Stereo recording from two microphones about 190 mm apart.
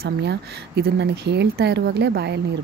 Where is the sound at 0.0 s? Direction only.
60° right (ahead or behind).